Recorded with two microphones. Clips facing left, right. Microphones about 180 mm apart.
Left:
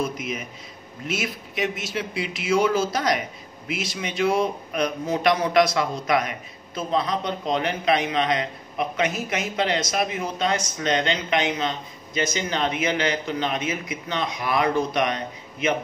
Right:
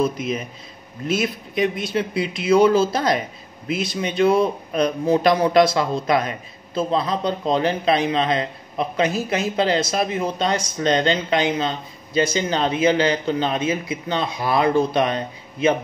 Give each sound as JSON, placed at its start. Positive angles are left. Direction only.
{"t": 0.0, "sound": "a man's voice", "side_deg": -30}